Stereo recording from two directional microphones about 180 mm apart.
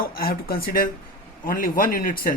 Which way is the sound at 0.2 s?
55° left (ahead or behind).